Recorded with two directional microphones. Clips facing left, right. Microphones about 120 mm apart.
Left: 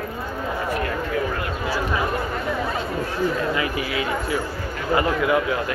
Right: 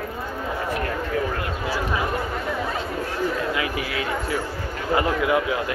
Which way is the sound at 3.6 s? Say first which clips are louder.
Left 2 dB; 5° left (ahead or behind).